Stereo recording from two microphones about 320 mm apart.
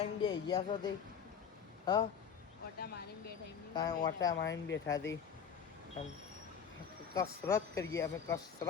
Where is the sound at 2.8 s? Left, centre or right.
Left.